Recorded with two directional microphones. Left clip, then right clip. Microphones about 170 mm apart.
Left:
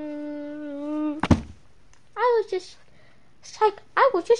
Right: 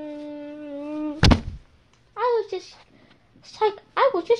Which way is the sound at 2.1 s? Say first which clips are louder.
Left 1 dB; 40° left (ahead or behind).